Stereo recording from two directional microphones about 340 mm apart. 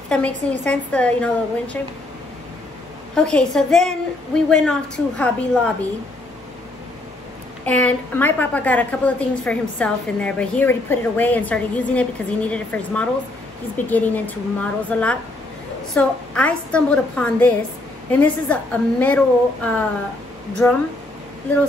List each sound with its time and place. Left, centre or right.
0.1 s a woman's voice: centre
3.2 s a woman's voice: centre
7.6 s a woman's voice: centre